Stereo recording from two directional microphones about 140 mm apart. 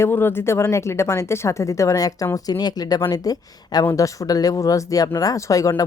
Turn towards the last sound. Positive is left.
turn(degrees=25)  # may be behind; listen again after turning